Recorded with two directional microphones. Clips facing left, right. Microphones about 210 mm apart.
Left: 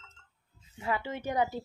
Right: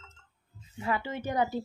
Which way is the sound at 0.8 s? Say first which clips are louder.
Right 1 dB; 20° left (ahead or behind).